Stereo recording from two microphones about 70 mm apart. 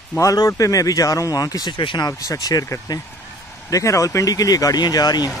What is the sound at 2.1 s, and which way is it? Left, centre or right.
Speech, left.